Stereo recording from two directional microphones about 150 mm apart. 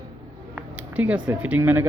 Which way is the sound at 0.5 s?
10° right (ahead or behind).